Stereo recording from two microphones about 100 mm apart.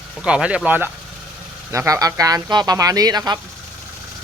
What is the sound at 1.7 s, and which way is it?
Speech, 30° right (ahead or behind).